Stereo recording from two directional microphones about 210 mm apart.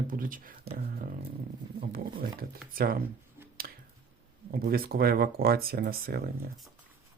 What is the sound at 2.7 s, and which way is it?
Speech, 45° right (ahead or behind).